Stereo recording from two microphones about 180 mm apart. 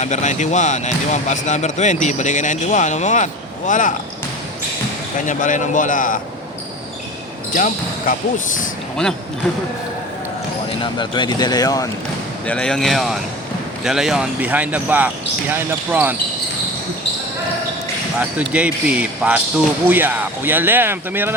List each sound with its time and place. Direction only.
0.0 s speech: 40° left (ahead or behind)
5.1 s speech: 45° left (ahead or behind)
7.5 s speech: 45° left (ahead or behind)
10.9 s speech: 25° left (ahead or behind)
12.5 s speech: 5° left (ahead or behind)
18.2 s speech: 5° right (ahead or behind)